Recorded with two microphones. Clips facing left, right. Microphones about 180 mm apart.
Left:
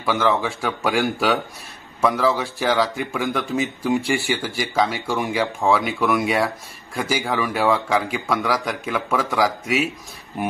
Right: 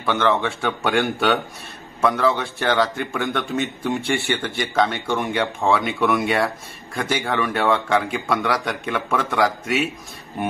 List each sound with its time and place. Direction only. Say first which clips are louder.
0.0 s a man's voice: even; 5° left (ahead or behind)